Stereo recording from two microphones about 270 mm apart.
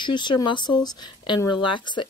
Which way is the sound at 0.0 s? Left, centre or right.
Centre.